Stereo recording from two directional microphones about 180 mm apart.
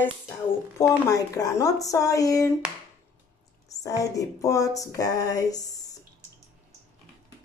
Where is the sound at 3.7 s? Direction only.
20° left (ahead or behind).